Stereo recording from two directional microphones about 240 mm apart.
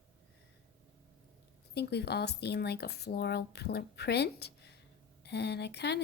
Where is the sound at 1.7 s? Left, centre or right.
Left.